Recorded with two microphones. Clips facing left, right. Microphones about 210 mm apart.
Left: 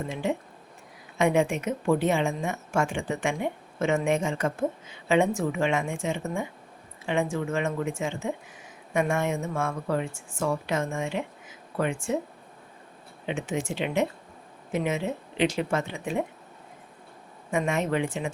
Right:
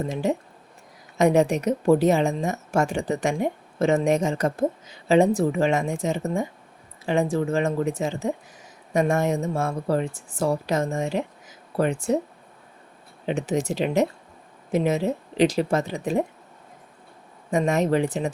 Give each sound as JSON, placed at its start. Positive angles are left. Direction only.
{"t": 0.1, "sound": "a woman's voice", "side_deg": -40}
{"t": 13.2, "sound": "a woman's voice", "side_deg": -40}
{"t": 17.5, "sound": "a woman's voice", "side_deg": -40}